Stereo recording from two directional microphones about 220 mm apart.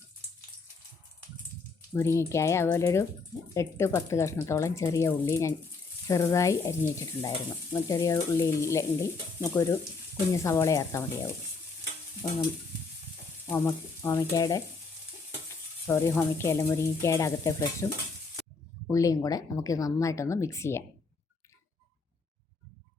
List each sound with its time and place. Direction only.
1.9 s speech: 10° left (ahead or behind)
12.2 s speech: 15° left (ahead or behind)
13.5 s speech: 15° left (ahead or behind)
15.9 s speech: 10° left (ahead or behind)
18.9 s speech: 15° left (ahead or behind)